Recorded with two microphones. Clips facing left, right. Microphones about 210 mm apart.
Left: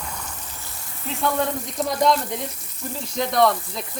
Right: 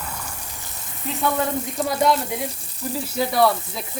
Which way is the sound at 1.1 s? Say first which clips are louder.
Right 1 dB; centre (ahead or behind).